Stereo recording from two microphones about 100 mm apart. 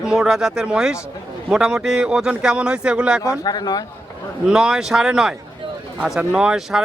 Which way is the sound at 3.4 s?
40° left (ahead or behind).